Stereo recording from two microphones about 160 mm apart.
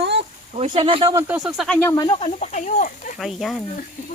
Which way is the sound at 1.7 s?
15° left (ahead or behind).